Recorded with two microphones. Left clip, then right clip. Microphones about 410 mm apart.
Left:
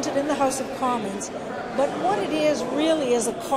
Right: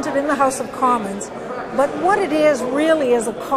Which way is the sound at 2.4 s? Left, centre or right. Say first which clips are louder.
Right 6 dB; right.